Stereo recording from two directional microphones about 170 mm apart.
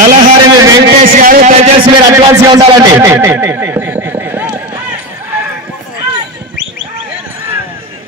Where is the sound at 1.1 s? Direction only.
50° right (ahead or behind).